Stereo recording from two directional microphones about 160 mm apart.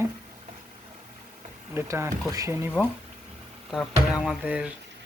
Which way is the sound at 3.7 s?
Centre (ahead or behind).